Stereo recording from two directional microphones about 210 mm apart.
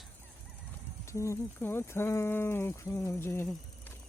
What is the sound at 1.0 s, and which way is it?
Speech, 15° left (ahead or behind).